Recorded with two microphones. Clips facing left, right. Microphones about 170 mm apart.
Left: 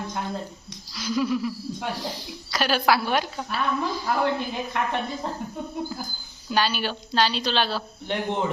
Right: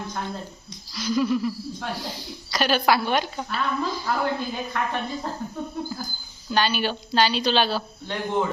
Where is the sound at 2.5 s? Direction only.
5° left (ahead or behind).